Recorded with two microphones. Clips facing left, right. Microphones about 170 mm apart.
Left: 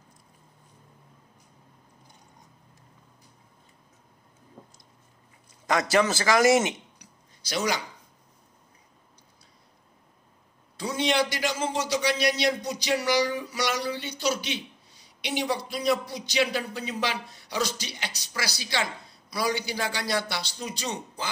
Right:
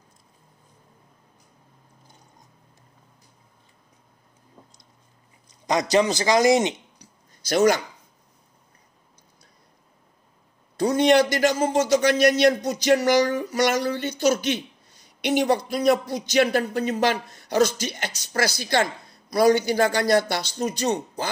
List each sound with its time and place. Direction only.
5.5 s a man's voice: 20° right (ahead or behind)
7.4 s speech: 50° right (ahead or behind)
10.8 s speech: 45° right (ahead or behind)